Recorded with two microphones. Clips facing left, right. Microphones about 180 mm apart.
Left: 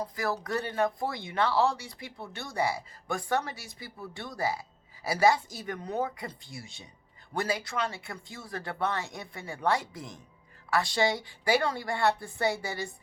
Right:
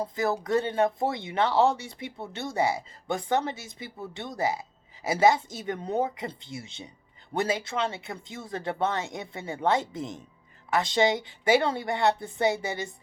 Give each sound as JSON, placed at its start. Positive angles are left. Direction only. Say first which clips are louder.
{"t": 0.0, "sound": "speech", "louder": "right 4 dB", "side_deg": -25}